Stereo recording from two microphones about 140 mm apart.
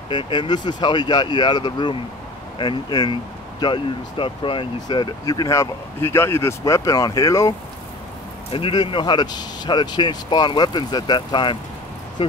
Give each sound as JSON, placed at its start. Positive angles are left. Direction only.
{"t": 0.1, "sound": "speech", "side_deg": 35}
{"t": 8.5, "sound": "speech", "side_deg": 40}